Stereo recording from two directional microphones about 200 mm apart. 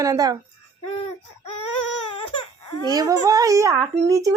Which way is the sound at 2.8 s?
15° right (ahead or behind).